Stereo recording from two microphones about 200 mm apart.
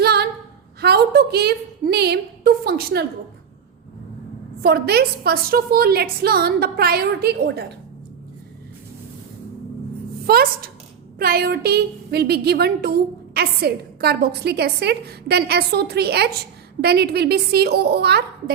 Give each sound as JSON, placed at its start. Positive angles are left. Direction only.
{"t": 0.0, "sound": "a sound", "side_deg": -55}
{"t": 0.8, "sound": "a woman's voice", "side_deg": -55}
{"t": 4.6, "sound": "a woman's voice", "side_deg": -50}
{"t": 10.2, "sound": "a woman's voice", "side_deg": -50}